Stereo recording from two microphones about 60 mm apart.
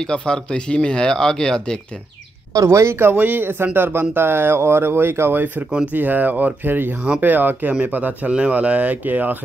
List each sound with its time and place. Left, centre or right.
0.0 s speech: centre
2.6 s speech: right
3.0 s speech: right
5.7 s speech: centre
5.9 s speech: right